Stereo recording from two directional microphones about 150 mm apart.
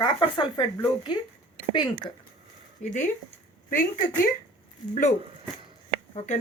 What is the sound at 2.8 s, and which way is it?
Speech, 55° left (ahead or behind).